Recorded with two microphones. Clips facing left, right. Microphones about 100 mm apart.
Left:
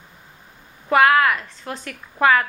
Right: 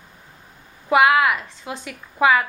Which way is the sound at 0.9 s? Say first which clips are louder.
Even; 10° right (ahead or behind).